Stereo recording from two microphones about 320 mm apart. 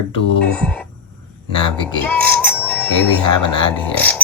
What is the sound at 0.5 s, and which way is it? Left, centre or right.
Music, centre.